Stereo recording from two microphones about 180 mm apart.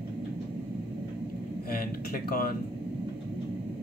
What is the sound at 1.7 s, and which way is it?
Speech, 55° left (ahead or behind).